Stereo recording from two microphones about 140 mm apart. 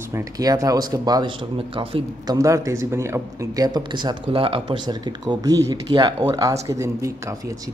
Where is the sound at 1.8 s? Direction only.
40° right (ahead or behind).